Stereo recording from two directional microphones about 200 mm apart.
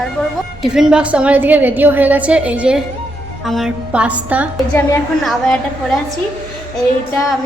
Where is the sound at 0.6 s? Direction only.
5° right (ahead or behind).